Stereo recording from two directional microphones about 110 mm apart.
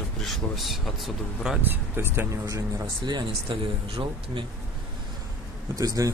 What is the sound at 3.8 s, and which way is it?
Speech, 55° right (ahead or behind).